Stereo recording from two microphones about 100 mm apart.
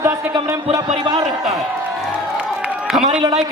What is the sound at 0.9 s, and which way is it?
Speech, 45° right (ahead or behind).